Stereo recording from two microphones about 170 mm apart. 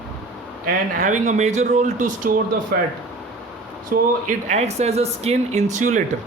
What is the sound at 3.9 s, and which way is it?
Speech, 60° right (ahead or behind).